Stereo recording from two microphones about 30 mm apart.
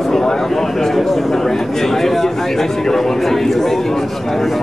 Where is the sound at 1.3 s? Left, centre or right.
Centre.